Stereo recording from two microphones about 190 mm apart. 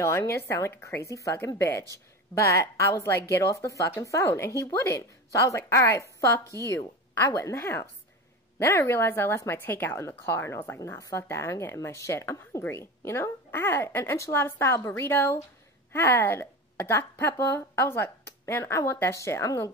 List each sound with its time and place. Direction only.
0.0 s speech: 15° left (ahead or behind)